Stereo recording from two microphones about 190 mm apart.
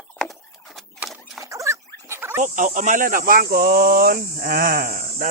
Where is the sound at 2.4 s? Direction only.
45° right (ahead or behind).